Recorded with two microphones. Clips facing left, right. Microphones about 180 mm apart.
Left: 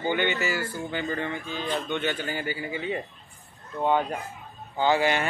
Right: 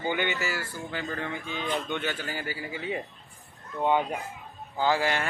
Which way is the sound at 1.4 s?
20° right (ahead or behind).